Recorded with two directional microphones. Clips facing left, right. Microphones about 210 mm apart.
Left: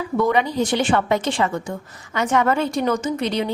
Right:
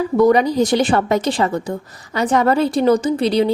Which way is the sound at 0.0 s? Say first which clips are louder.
Right 6 dB; 40° right (ahead or behind).